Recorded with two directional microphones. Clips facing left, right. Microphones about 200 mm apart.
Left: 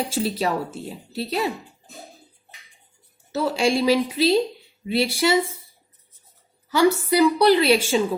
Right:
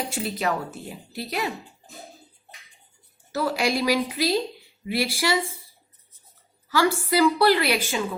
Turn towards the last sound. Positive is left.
turn(degrees=25)  # may be behind; listen again after turning